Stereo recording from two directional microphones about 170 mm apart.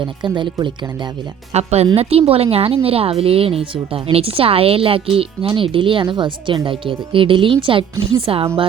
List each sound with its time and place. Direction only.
0.0 s speech: 25° right (ahead or behind)
1.5 s a woman's voice: 40° right (ahead or behind)